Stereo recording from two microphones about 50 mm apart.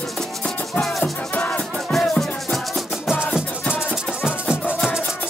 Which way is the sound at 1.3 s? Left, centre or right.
Left.